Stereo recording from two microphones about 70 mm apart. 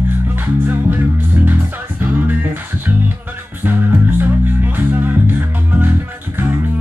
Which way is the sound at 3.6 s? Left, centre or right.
Right.